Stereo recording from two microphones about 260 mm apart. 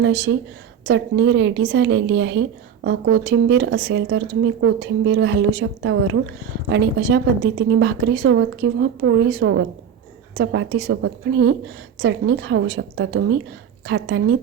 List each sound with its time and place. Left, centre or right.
0.0 s a woman's voice: right